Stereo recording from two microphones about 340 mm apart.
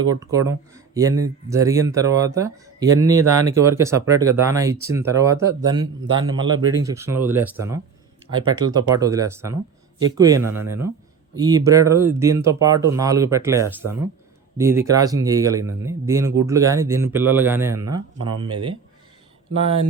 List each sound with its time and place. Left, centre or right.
0.1 s speech: centre